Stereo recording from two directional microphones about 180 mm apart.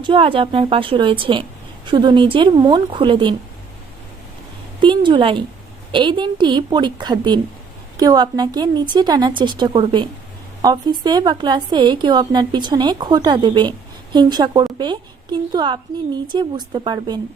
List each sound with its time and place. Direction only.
0.0 s a woman's voice: 30° right (ahead or behind)
4.8 s a woman's voice: 25° right (ahead or behind)